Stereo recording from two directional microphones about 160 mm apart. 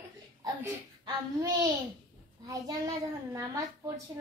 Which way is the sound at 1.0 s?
25° right (ahead or behind).